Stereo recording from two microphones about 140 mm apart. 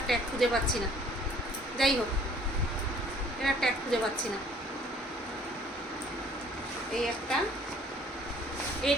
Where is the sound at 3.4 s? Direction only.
Centre (ahead or behind).